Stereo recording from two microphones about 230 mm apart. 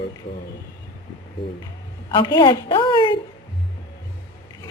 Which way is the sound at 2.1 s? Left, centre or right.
Centre.